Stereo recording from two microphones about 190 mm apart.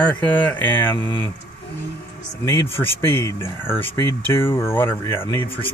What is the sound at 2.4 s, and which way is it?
Speech, 15° left (ahead or behind).